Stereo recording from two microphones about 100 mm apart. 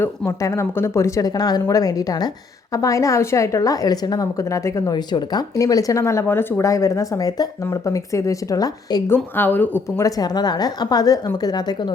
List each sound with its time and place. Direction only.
0.0 s speech: 30° left (ahead or behind)
9.0 s speech: 20° left (ahead or behind)
10.0 s speech: 40° left (ahead or behind)